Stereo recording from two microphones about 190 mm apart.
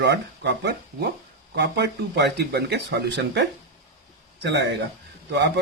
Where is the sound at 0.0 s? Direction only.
65° right (ahead or behind).